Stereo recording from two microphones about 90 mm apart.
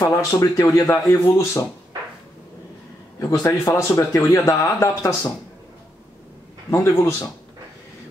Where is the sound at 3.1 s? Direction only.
40° left (ahead or behind).